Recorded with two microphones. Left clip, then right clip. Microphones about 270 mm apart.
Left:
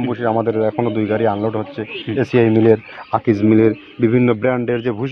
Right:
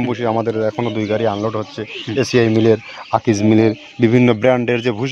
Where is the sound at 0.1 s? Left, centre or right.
Right.